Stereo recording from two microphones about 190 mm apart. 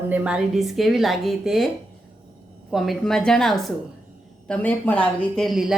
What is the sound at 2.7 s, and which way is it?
A woman's voice, centre (ahead or behind).